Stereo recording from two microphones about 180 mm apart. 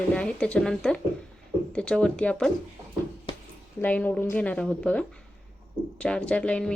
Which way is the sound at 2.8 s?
20° right (ahead or behind).